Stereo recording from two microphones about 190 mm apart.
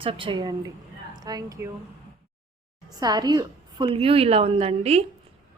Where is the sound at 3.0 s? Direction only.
20° right (ahead or behind).